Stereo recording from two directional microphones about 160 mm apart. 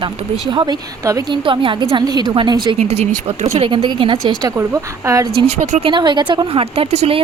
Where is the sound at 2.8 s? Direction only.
45° right (ahead or behind).